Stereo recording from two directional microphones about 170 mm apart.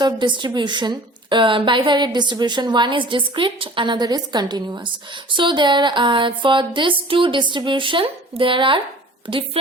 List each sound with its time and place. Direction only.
0.0 s a woman's voice: 30° right (ahead or behind)